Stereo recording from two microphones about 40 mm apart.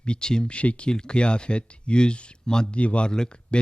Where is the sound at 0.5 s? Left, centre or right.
Left.